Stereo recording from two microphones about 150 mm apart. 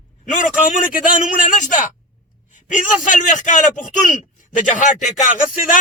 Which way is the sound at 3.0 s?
55° left (ahead or behind).